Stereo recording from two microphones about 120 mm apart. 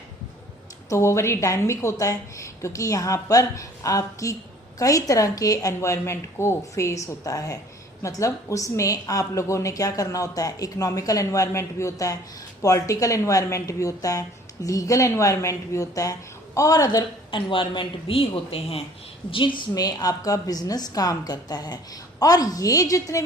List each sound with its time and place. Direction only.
0.9 s a woman's voice: 25° left (ahead or behind); by 19.6 s 45° left (ahead or behind)
19.7 s a woman's voice: 30° left (ahead or behind)